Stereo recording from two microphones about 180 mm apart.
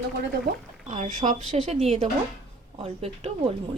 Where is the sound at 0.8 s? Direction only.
45° right (ahead or behind).